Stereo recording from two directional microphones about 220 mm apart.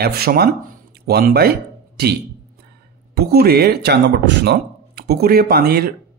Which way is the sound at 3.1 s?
45° right (ahead or behind).